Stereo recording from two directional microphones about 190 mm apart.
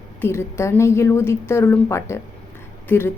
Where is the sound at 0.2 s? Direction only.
15° left (ahead or behind).